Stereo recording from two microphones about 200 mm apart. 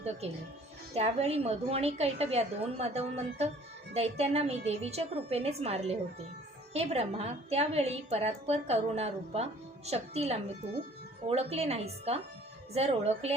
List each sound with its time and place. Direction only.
0.9 s a woman's voice: 35° right (ahead or behind)